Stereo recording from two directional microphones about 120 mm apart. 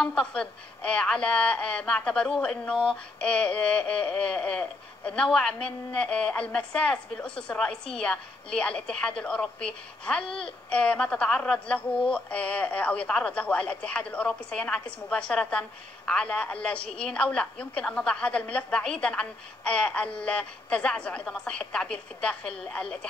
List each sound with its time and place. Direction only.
0.0 s speech: 5° left (ahead or behind)